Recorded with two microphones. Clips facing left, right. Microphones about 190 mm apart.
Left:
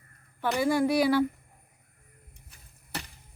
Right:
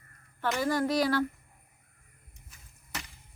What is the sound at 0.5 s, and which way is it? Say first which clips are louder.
Speech: left 4 dB; 10° left (ahead or behind).